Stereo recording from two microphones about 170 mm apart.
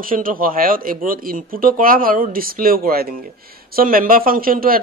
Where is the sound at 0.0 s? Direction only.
55° right (ahead or behind).